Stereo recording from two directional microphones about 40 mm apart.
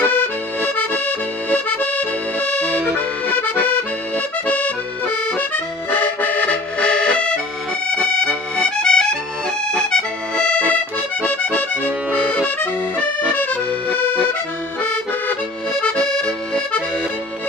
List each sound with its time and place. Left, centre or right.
0.0 s accordion: left
1.7 s accordion: left
3.3 s accordion: left
4.5 s accordion: left
5.9 s accordion: left
6.3 s accordion: left
13.3 s accordion: left
13.9 s accordion: left